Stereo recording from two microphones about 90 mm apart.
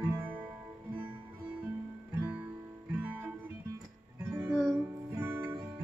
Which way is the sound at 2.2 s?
20° right (ahead or behind).